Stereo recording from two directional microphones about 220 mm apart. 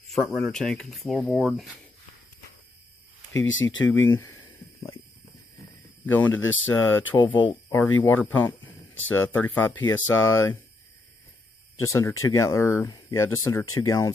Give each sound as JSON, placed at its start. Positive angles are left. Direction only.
{"t": 0.1, "sound": "speech", "side_deg": 0}
{"t": 3.3, "sound": "speech", "side_deg": 60}
{"t": 4.1, "sound": "speech", "side_deg": 10}
{"t": 6.0, "sound": "speech", "side_deg": 10}
{"t": 7.3, "sound": "speech", "side_deg": 20}
{"t": 8.0, "sound": "speech", "side_deg": 10}
{"t": 11.8, "sound": "speech", "side_deg": 15}